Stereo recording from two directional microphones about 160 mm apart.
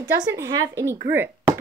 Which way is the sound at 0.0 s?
20° right (ahead or behind).